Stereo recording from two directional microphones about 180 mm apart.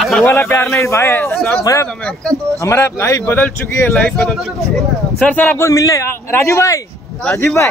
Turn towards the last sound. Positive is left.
turn(degrees=15)  # may be behind; listen again after turning